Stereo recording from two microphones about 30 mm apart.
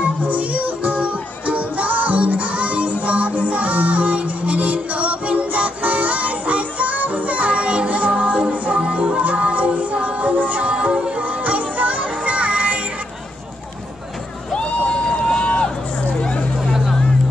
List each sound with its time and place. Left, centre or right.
0.0 s music: right
1.0 s music: right
10.9 s music: right
11.1 s music: right
14.6 s a sound: left
15.1 s run: left
15.4 s run: left
16.2 s a sound: left